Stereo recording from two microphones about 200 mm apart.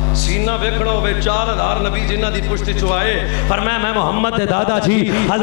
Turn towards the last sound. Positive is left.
turn(degrees=15)  # may be behind; listen again after turning